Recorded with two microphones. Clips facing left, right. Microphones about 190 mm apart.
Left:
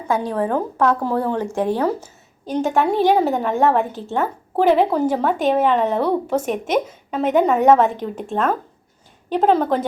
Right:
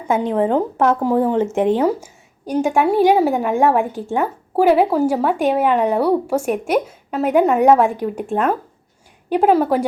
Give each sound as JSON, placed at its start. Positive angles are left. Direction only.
{"t": 0.1, "sound": "a woman's voice", "side_deg": -20}